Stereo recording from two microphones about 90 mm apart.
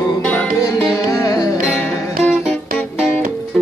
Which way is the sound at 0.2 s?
15° left (ahead or behind).